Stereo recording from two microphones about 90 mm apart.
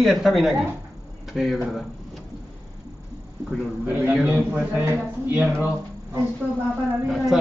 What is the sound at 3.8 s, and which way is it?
A man's voice, 20° right (ahead or behind).